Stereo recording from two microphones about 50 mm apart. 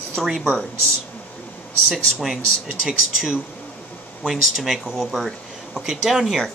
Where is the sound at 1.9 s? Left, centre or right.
Centre.